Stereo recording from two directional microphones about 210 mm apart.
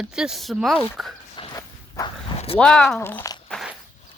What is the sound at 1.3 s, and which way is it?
Walk, 20° left (ahead or behind).